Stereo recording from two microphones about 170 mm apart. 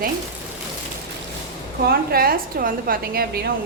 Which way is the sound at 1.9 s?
60° right (ahead or behind).